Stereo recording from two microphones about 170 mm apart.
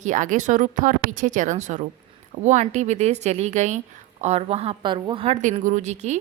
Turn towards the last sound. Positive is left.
turn(degrees=-40)  # may be behind; listen again after turning